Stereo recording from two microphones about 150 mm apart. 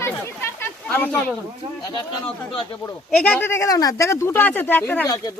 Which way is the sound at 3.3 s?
15° left (ahead or behind).